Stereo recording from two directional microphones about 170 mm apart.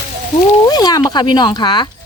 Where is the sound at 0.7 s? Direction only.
20° left (ahead or behind).